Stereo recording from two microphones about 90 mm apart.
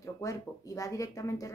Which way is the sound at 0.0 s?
35° left (ahead or behind).